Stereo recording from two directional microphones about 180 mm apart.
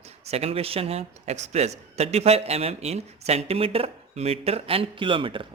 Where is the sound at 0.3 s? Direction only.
35° right (ahead or behind).